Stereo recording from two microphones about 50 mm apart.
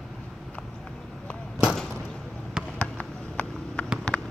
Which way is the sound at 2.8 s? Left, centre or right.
Left.